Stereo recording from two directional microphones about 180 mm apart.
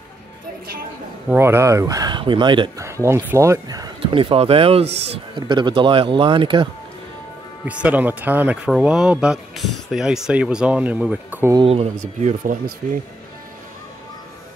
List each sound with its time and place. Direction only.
1.3 s speech: 15° right (ahead or behind)
2.8 s speech: 15° right (ahead or behind)
7.6 s speech: 5° right (ahead or behind)
11.5 s speech: 30° right (ahead or behind)